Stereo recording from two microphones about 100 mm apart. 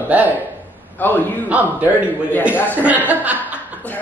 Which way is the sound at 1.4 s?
15° right (ahead or behind).